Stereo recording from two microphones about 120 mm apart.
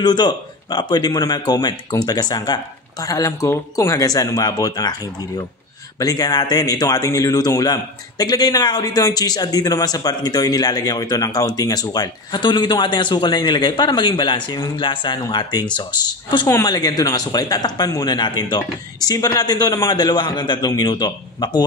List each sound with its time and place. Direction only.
0.0 s a man's voice: 35° left (ahead or behind)
5.9 s a man's voice: 30° left (ahead or behind)
16.4 s a man's voice: 30° left (ahead or behind)